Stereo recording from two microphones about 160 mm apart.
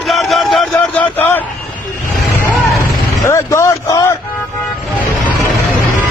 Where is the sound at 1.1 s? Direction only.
10° left (ahead or behind).